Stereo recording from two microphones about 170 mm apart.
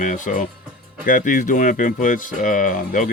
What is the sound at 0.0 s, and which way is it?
Speech, 50° left (ahead or behind).